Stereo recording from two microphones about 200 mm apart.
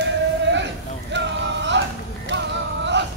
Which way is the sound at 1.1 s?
60° right (ahead or behind).